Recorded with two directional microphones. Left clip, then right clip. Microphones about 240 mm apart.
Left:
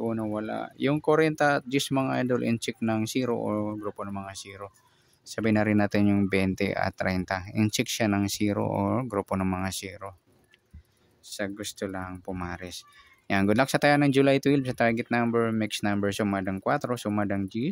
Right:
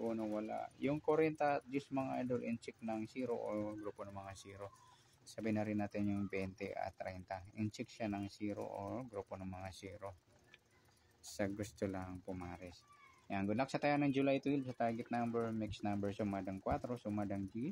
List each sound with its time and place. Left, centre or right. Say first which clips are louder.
0.0 s speech: left 11 dB; left
11.3 s speech: left 9 dB; centre; by 17.6 s left